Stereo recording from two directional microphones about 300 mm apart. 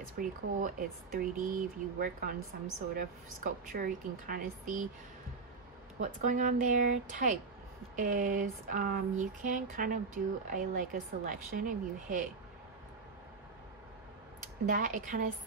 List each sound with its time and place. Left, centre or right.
0.2 s a woman's voice: right
2.0 s a woman's voice: right
5.9 s a woman's voice: right
14.4 s speech: right